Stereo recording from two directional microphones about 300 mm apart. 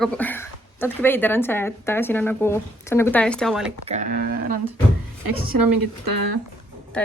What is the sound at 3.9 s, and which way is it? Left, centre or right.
Speech, right.